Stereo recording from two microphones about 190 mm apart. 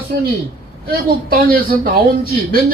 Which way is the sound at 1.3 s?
50° right (ahead or behind).